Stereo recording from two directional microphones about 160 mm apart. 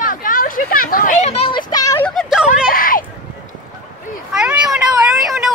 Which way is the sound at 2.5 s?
60° left (ahead or behind).